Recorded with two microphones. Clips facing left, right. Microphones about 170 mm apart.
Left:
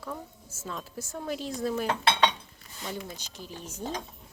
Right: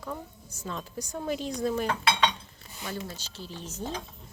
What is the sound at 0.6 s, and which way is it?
A woman's voice, centre (ahead or behind).